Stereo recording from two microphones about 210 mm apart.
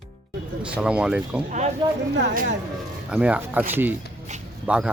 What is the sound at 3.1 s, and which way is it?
Speech, 5° right (ahead or behind).